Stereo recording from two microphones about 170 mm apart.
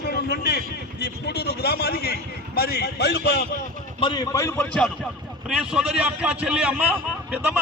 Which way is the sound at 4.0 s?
25° left (ahead or behind).